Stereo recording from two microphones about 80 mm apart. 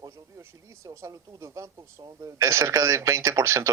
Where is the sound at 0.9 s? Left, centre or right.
Right.